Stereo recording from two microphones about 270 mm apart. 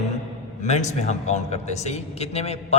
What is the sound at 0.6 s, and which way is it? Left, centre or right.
A man's voice, left.